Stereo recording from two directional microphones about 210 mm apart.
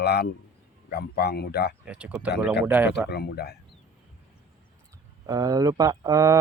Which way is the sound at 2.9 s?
50° left (ahead or behind).